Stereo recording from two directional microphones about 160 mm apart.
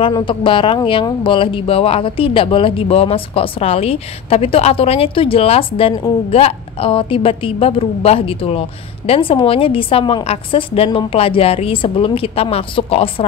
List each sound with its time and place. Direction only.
0.0 s a woman's voice: 30° left (ahead or behind)